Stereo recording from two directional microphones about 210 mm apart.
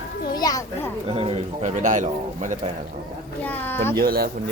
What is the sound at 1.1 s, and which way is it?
Speech, 25° right (ahead or behind).